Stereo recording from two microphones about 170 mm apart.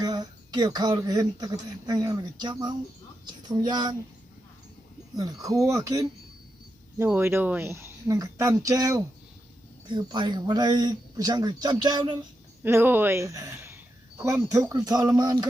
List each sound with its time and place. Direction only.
0.0 s speech: 25° right (ahead or behind)
5.1 s speech: 20° right (ahead or behind)
12.6 s speech: 10° right (ahead or behind)